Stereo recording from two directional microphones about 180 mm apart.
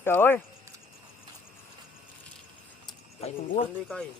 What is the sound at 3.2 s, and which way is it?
Speech, 30° left (ahead or behind).